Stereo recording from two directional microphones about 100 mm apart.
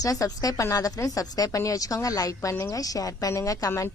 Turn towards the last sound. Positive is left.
turn(degrees=30)  # may be behind; listen again after turning